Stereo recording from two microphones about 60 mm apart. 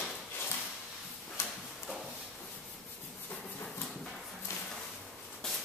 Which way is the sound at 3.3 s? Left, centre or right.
Left.